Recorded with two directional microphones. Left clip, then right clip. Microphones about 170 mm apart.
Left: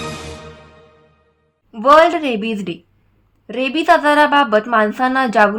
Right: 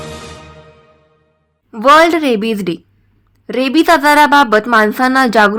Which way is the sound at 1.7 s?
35° right (ahead or behind).